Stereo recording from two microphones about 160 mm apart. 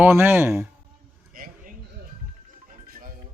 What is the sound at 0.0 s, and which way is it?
Speech, 15° right (ahead or behind).